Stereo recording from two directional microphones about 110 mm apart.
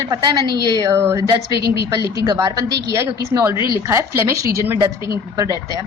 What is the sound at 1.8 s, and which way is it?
A woman's voice, 35° right (ahead or behind).